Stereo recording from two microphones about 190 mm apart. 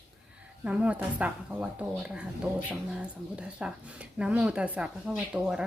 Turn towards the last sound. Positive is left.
turn(degrees=-5)  # may be behind; listen again after turning